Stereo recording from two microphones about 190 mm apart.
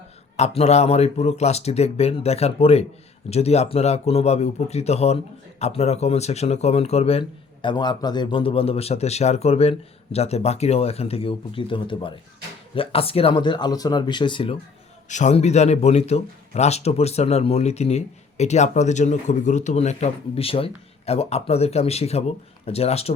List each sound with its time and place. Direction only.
0.3 s speech: 35° left (ahead or behind)
15.1 s speech: 40° left (ahead or behind)